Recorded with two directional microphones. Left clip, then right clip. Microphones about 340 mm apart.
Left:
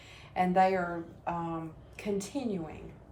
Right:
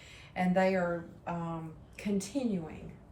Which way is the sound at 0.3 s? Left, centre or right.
Centre.